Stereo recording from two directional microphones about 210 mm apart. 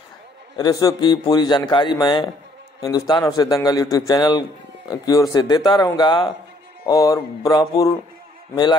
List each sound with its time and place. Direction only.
0.6 s a man's voice: 20° left (ahead or behind)